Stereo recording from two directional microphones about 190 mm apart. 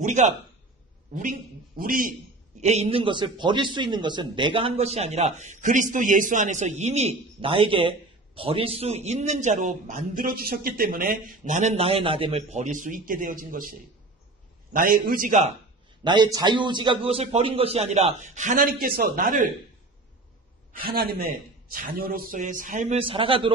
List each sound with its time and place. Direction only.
0.0 s a man's voice: 40° right (ahead or behind)
1.8 s a man's voice: 45° right (ahead or behind)
2.6 s a man's voice: 35° right (ahead or behind)
16.0 s a man's voice: 25° right (ahead or behind); by 19.5 s 45° right (ahead or behind)
20.7 s a man's voice: 50° right (ahead or behind); by 23.5 s 25° right (ahead or behind)